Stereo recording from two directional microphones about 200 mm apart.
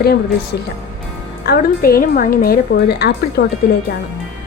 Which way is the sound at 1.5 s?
50° left (ahead or behind).